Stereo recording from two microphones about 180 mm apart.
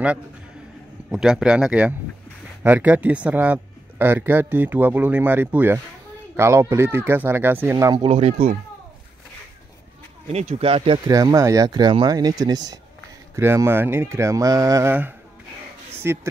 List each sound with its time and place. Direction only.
1.1 s speech: 5° right (ahead or behind)
7.9 s speech: 25° right (ahead or behind)
10.2 s speech: 35° right (ahead or behind); by 16.2 s 15° right (ahead or behind)